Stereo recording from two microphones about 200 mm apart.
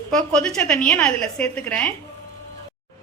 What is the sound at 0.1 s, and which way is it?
A woman's voice, 5° left (ahead or behind).